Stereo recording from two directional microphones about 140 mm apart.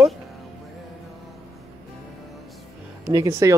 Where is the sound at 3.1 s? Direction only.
25° right (ahead or behind).